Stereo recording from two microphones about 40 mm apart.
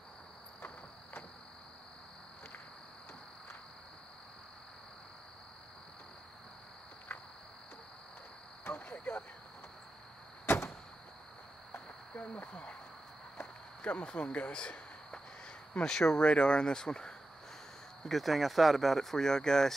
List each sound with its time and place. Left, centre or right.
8.6 s cricket: left
10.4 s door: left
12.2 s speech: left
13.4 s a sound: left
14.0 s speech: left
14.5 s a sound: left
15.8 s speech: centre
16.2 s speech: left
18.0 s speech: centre